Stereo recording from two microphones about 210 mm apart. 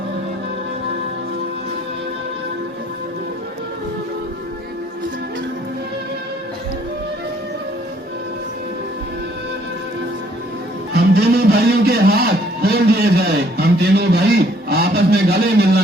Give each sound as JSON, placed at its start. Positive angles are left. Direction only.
{"t": 10.9, "sound": "a man's voice", "side_deg": -50}